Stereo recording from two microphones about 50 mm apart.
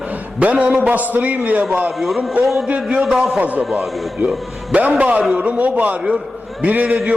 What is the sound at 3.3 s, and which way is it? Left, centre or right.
Speech, right.